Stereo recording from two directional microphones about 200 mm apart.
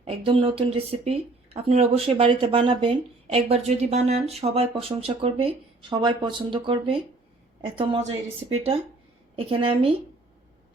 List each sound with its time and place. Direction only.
0.0 s speech: 25° right (ahead or behind)
9.3 s speech: 25° right (ahead or behind)